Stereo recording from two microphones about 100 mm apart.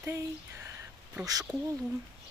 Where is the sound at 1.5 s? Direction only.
40° right (ahead or behind).